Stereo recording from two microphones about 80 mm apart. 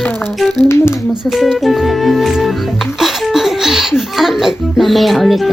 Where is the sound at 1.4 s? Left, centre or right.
Centre.